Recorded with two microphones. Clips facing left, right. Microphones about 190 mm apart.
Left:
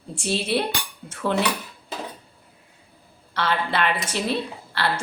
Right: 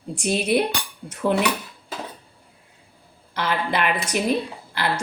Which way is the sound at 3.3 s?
15° right (ahead or behind).